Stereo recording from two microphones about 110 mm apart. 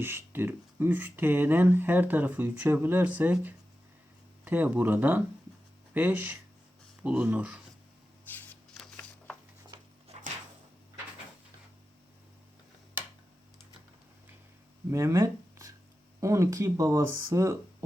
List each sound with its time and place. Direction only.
0.0 s speech: 20° right (ahead or behind)
4.4 s speech: 15° right (ahead or behind)
8.3 s a sound: 15° left (ahead or behind)
14.8 s speech: 25° right (ahead or behind)
15.1 s a sound: 30° right (ahead or behind)
16.2 s speech: 30° right (ahead or behind)